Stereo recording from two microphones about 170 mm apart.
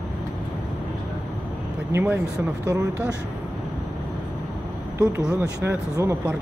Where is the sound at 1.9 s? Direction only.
15° right (ahead or behind).